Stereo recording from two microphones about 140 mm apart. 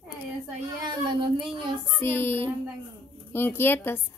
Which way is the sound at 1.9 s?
15° left (ahead or behind).